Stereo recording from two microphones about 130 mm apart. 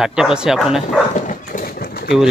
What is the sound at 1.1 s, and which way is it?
Dog, 80° left.